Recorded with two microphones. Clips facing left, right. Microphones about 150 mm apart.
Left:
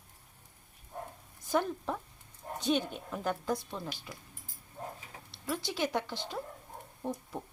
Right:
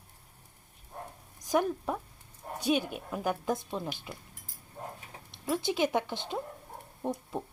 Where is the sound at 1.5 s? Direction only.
10° right (ahead or behind).